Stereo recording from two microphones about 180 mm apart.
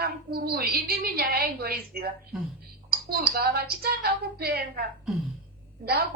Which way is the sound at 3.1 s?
60° right (ahead or behind).